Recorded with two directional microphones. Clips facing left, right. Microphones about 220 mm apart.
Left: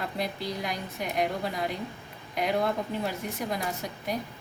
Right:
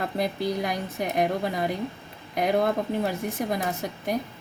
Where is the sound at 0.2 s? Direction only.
50° right (ahead or behind).